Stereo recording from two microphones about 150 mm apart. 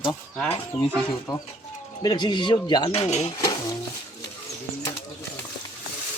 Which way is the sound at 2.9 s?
45° left (ahead or behind).